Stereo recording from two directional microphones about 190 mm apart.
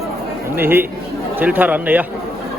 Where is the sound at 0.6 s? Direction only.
10° right (ahead or behind).